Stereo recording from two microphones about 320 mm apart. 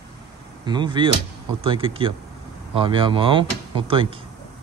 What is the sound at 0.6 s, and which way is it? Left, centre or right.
A man's voice, centre.